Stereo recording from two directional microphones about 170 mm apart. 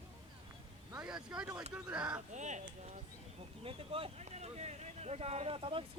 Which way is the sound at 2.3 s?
45° right (ahead or behind).